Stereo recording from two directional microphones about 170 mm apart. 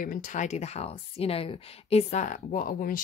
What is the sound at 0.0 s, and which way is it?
Speech, 55° left (ahead or behind).